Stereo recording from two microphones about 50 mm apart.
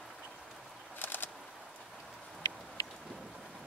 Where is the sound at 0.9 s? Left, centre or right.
Left.